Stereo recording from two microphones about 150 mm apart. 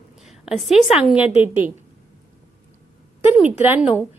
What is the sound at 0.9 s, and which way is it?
Speech, 5° right (ahead or behind).